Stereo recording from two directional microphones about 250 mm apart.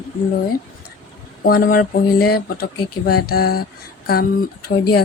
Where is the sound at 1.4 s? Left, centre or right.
Left.